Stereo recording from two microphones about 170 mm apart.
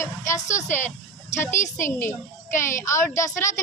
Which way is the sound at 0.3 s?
45° left (ahead or behind).